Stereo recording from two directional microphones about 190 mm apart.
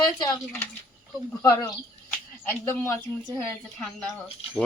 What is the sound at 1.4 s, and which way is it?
Speech, 15° left (ahead or behind).